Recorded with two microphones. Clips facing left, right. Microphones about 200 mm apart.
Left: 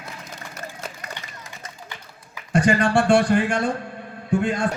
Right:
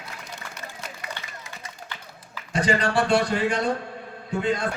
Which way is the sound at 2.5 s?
50° left (ahead or behind).